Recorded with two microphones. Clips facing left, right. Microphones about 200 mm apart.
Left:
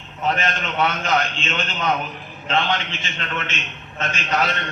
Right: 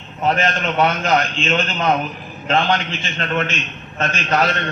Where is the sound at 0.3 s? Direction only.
40° right (ahead or behind).